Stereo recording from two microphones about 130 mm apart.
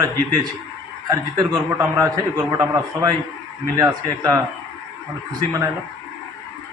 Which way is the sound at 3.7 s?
25° right (ahead or behind).